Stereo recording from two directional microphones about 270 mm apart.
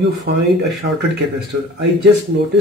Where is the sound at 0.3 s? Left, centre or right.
Right.